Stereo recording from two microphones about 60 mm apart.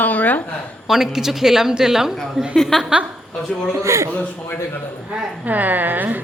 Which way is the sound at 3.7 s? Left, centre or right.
Right.